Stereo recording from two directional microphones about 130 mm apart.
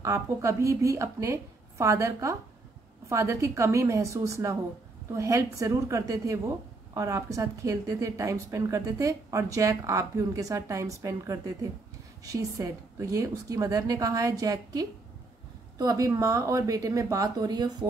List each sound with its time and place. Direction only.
0.0 s speech: 25° right (ahead or behind)